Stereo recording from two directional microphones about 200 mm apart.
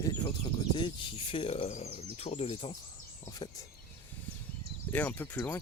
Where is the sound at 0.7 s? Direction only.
25° left (ahead or behind).